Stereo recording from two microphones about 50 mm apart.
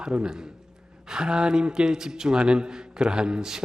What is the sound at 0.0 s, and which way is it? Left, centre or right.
A man's voice, centre.